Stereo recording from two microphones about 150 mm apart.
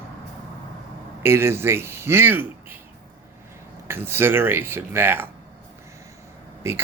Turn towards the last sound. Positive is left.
turn(degrees=-20)  # may be behind; listen again after turning